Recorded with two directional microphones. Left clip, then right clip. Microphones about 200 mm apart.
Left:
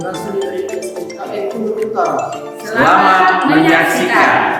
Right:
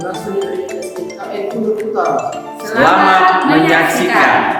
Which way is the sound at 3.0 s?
Centre (ahead or behind).